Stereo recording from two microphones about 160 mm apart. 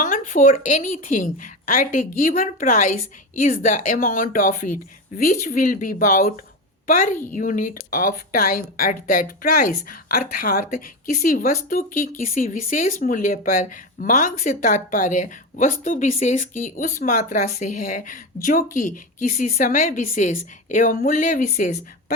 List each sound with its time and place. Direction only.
0.0 s a woman's voice: 50° left (ahead or behind)